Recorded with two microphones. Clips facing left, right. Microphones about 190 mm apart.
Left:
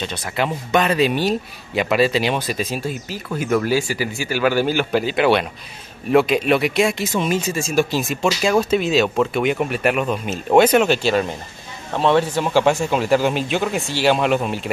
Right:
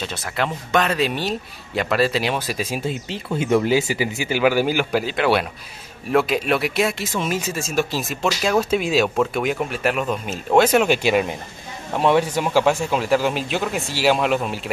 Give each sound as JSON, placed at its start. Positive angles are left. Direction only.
{"t": 0.0, "sound": "speech", "side_deg": 0}
{"t": 2.8, "sound": "speech", "side_deg": -25}
{"t": 5.0, "sound": "speech", "side_deg": 0}
{"t": 10.9, "sound": "speech", "side_deg": -15}